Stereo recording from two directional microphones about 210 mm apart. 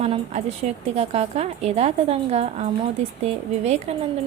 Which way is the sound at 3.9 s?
30° right (ahead or behind).